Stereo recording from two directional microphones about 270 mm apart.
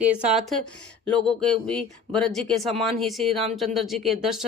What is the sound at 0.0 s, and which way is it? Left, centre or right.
Speech, centre.